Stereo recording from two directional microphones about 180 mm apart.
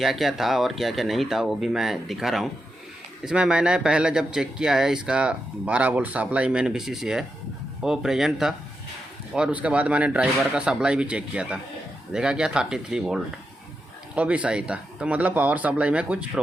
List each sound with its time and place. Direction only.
0.0 s speech: centre (ahead or behind)